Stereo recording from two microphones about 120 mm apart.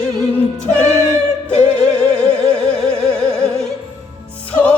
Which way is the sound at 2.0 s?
10° left (ahead or behind).